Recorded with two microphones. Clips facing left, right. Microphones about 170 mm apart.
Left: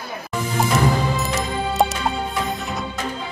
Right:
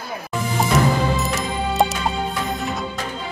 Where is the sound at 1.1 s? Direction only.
Centre (ahead or behind).